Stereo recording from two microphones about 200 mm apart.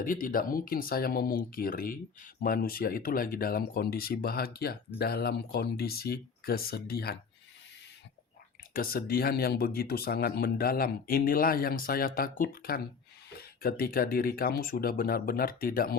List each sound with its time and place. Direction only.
0.0 s speech: 45° left (ahead or behind)
8.7 s speech: 50° left (ahead or behind)